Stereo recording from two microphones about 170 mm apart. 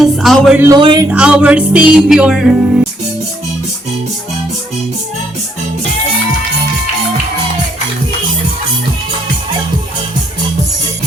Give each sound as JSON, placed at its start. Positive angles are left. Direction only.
{"t": 0.0, "sound": "speech", "side_deg": 0}
{"t": 0.8, "sound": "speech", "side_deg": -30}
{"t": 1.1, "sound": "music", "side_deg": -5}